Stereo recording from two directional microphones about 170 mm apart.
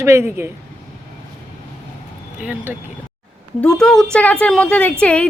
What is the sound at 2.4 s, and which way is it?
Speech, 10° right (ahead or behind).